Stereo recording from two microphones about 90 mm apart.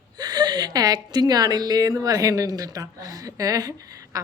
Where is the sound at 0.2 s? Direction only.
50° right (ahead or behind).